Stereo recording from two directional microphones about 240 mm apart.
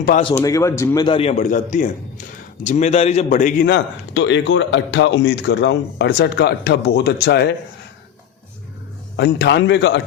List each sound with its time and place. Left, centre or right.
0.2 s a man's voice: left
9.1 s a man's voice: left